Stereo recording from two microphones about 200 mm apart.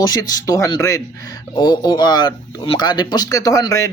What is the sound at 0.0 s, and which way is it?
A man's voice, 20° left (ahead or behind).